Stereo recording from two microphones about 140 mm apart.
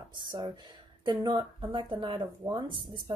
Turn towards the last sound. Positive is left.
turn(degrees=-35)  # may be behind; listen again after turning